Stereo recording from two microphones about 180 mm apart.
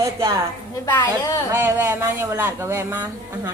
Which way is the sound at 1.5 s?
15° right (ahead or behind).